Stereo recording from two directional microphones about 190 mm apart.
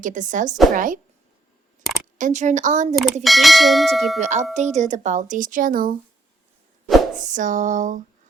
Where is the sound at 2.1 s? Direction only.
40° right (ahead or behind).